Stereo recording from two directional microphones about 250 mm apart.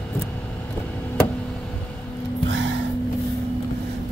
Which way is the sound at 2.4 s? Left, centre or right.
Right.